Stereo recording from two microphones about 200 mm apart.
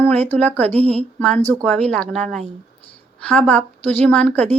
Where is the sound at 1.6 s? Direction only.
5° left (ahead or behind).